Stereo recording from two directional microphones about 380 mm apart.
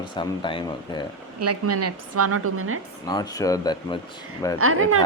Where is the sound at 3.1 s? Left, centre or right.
Centre.